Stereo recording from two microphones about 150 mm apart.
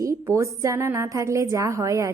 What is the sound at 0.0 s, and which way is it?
A woman's voice, 20° right (ahead or behind).